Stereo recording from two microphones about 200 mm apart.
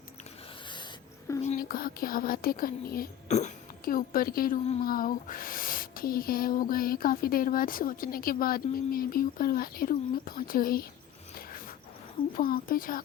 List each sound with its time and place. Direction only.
1.4 s speech: 40° left (ahead or behind)
3.2 s speech: 35° left (ahead or behind)
12.4 s speech: 45° left (ahead or behind)